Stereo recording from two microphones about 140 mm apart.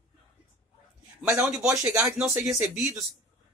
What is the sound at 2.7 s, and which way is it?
Speech, 10° right (ahead or behind).